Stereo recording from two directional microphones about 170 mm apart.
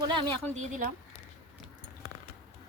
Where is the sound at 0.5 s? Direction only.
45° right (ahead or behind).